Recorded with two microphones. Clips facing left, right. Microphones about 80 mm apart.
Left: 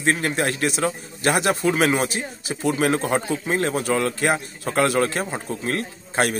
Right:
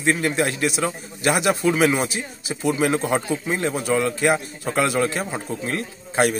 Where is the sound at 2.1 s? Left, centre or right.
Left.